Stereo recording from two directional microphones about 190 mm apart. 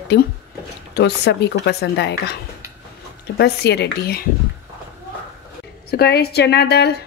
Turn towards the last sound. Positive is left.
turn(degrees=60)  # may be behind; listen again after turning